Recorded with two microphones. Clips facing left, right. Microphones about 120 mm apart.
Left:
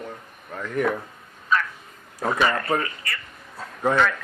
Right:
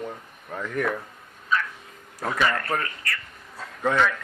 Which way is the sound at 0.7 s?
15° left (ahead or behind).